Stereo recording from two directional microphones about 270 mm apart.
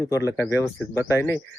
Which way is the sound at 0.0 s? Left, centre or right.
Centre.